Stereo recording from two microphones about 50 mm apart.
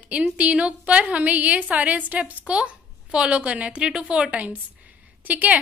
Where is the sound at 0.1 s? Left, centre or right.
Right.